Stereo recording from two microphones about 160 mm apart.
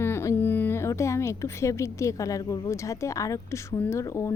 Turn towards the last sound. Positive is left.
turn(degrees=15)  # may be behind; listen again after turning